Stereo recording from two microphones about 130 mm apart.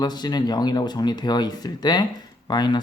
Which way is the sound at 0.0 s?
30° left (ahead or behind).